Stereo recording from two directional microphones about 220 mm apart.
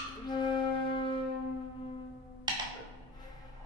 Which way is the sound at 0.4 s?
20° left (ahead or behind).